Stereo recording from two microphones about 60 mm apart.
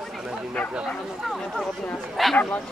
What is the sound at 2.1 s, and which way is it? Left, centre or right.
Speech, centre.